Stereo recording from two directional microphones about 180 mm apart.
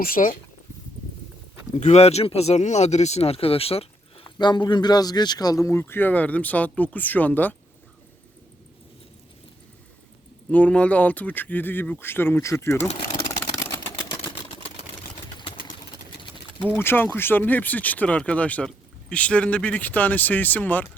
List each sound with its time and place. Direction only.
0.0 s speech: 50° left (ahead or behind)
1.7 s speech: 40° left (ahead or behind); by 7.5 s 10° left (ahead or behind)
10.5 s speech: 5° left (ahead or behind)
13.5 s vehicle: 20° left (ahead or behind)
15.4 s engine: 30° left (ahead or behind)
16.7 s speech: 10° left (ahead or behind)